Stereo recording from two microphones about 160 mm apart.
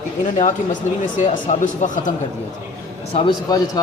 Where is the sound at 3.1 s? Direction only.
40° left (ahead or behind).